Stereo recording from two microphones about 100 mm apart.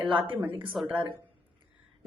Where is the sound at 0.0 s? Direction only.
60° right (ahead or behind).